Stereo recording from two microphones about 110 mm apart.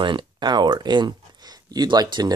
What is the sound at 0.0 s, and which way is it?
Speech, 45° right (ahead or behind).